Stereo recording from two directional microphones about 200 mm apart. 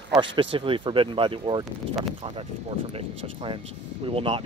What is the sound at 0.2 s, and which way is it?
Speech, 25° right (ahead or behind).